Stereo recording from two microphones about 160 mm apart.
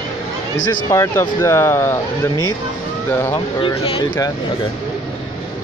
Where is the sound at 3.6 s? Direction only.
35° left (ahead or behind).